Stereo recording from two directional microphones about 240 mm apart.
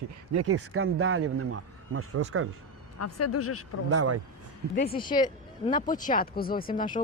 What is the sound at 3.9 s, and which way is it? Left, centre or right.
Speech, right.